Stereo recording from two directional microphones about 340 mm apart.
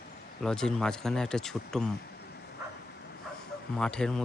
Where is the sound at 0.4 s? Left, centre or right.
Centre.